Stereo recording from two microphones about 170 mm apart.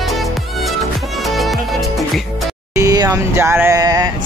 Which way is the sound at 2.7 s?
20° right (ahead or behind).